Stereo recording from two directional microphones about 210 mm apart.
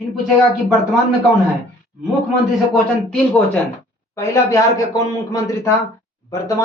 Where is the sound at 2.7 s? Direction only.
5° left (ahead or behind).